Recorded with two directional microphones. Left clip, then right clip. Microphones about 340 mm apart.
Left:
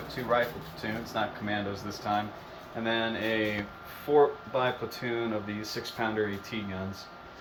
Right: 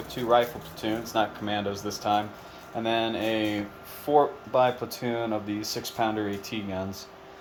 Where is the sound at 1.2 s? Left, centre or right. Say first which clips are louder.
Right 5 dB; right.